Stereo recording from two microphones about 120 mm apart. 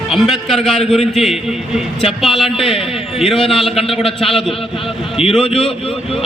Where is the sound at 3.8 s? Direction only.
50° left (ahead or behind).